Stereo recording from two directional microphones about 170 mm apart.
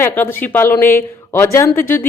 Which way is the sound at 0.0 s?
15° left (ahead or behind).